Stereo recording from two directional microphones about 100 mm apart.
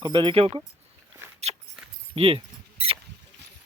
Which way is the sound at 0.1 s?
55° right (ahead or behind).